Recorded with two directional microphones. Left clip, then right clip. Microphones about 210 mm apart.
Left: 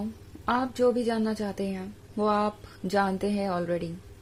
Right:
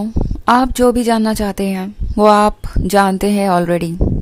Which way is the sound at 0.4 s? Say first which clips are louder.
Right 13 dB; 45° right (ahead or behind).